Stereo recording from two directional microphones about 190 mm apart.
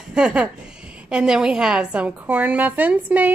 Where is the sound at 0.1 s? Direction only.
5° right (ahead or behind).